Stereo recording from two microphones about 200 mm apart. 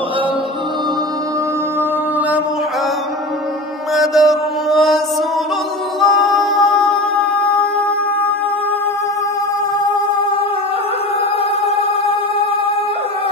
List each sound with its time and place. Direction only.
3.9 s mantra: centre (ahead or behind)
5.9 s music: centre (ahead or behind)
11.6 s music: 25° left (ahead or behind)